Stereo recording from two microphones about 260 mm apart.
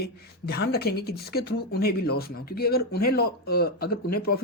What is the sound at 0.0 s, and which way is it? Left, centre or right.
Speech, left.